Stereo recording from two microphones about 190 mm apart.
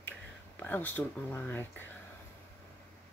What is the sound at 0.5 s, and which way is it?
Speech, 10° left (ahead or behind).